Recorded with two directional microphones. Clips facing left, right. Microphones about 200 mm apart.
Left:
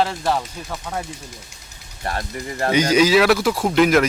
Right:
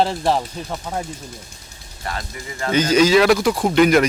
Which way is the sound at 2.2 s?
50° left (ahead or behind).